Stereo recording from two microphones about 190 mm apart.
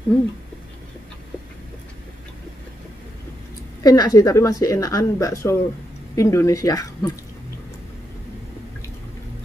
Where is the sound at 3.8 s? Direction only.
20° left (ahead or behind).